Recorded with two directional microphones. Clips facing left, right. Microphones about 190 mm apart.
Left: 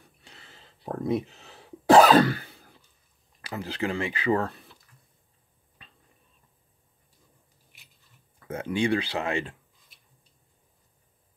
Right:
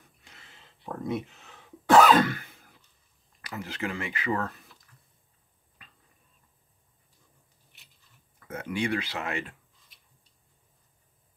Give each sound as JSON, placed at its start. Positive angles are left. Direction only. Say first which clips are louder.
{"t": 0.2, "sound": "throat clearing", "louder": "left 3 dB", "side_deg": 35}
{"t": 3.4, "sound": "speech", "louder": "left 4 dB", "side_deg": 30}
{"t": 5.8, "sound": "a sound", "louder": "left 2 dB", "side_deg": 30}
{"t": 8.5, "sound": "speech", "louder": "left 4 dB", "side_deg": 30}